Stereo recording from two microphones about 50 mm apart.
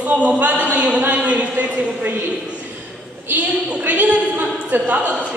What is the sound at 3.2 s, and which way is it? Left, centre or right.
A woman's voice, right.